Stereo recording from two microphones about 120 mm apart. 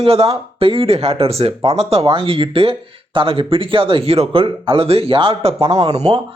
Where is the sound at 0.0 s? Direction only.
55° right (ahead or behind).